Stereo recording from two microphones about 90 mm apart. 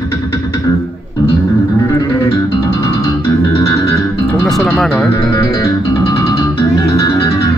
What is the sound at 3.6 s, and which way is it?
Music, 35° left (ahead or behind).